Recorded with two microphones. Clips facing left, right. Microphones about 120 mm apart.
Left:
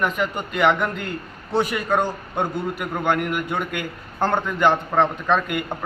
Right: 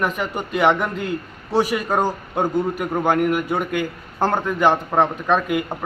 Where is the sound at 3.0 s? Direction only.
10° right (ahead or behind).